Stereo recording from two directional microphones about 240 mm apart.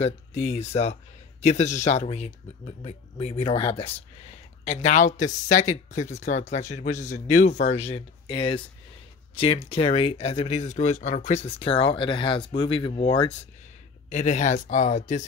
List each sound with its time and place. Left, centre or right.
0.0 s speech: left